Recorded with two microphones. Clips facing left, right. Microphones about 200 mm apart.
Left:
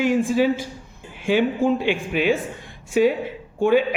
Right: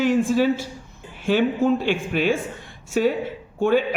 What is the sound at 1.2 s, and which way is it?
Speech, 10° left (ahead or behind).